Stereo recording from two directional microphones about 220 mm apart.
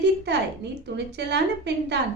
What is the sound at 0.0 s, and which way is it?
A woman's voice, 50° right (ahead or behind).